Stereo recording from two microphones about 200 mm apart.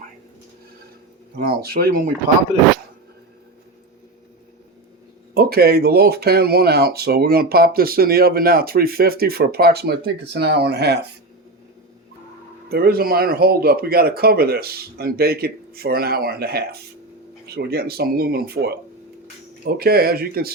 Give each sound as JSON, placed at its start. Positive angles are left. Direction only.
{"t": 1.4, "sound": "speech", "side_deg": -50}
{"t": 5.3, "sound": "speech", "side_deg": -50}
{"t": 12.6, "sound": "speech", "side_deg": -50}